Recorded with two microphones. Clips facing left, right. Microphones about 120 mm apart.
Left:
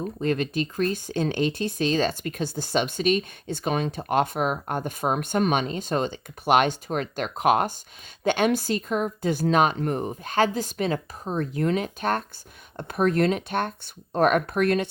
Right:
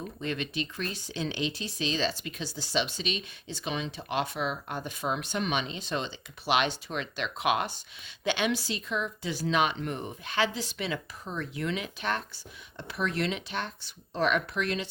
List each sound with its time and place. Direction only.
0.0 s speech: 45° left (ahead or behind)